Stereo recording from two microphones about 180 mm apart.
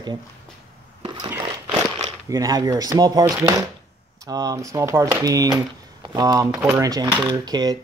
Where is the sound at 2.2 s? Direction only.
20° right (ahead or behind).